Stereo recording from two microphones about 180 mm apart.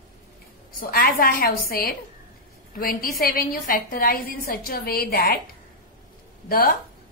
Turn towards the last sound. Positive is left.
turn(degrees=55)  # may be behind; listen again after turning